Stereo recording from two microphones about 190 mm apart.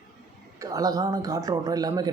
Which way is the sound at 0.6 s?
20° right (ahead or behind).